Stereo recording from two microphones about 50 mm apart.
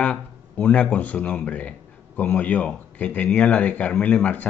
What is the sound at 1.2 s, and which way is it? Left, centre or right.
A man's voice, left.